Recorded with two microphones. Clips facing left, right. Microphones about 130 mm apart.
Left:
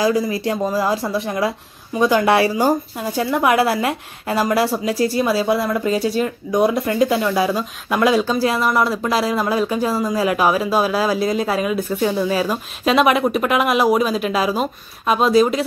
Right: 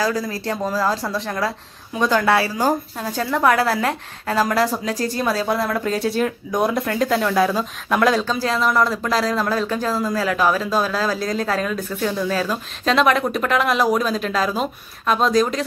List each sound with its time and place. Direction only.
0.0 s speech: 15° left (ahead or behind)